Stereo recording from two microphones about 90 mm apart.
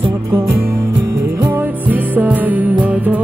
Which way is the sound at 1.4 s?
20° right (ahead or behind).